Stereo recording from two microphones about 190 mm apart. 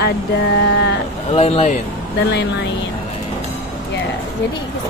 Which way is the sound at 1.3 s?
35° left (ahead or behind).